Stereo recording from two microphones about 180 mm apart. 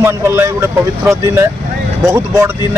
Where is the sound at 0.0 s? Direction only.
15° right (ahead or behind).